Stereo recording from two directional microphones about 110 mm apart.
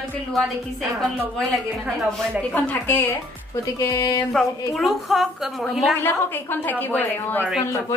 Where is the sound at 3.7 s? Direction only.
30° left (ahead or behind).